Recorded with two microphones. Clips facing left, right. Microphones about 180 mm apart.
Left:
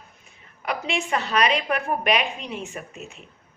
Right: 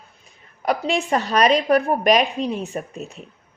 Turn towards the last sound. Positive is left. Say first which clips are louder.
# right 7 dB
turn(degrees=-35)  # may be behind; listen again after turning